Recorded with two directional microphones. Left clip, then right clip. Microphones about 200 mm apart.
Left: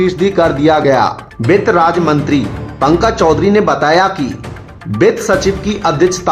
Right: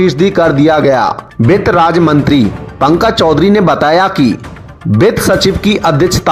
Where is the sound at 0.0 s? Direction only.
30° right (ahead or behind).